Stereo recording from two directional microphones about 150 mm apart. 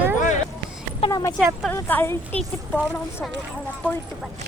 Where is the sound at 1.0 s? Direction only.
40° left (ahead or behind).